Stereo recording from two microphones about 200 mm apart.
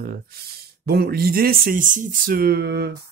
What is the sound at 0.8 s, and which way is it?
Speech, 50° right (ahead or behind).